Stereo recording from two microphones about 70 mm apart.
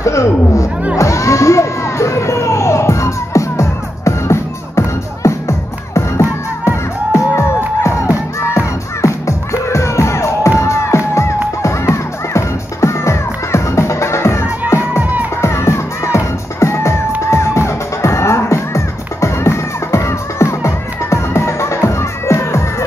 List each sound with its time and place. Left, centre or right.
0.0 s speech: left
0.9 s music: left
15.0 s music: right
15.4 s music: left